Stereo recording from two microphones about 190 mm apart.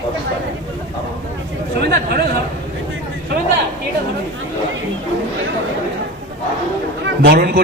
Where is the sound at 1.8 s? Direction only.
55° right (ahead or behind).